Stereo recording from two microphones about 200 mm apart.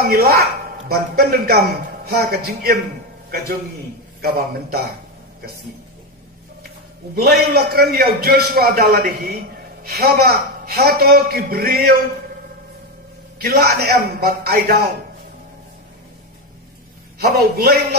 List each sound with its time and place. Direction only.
0.0 s speech: 50° right (ahead or behind)
4.2 s speech: 50° right (ahead or behind)
7.2 s speech: 50° right (ahead or behind)
13.4 s speech: 50° right (ahead or behind)
17.2 s speech: 50° right (ahead or behind)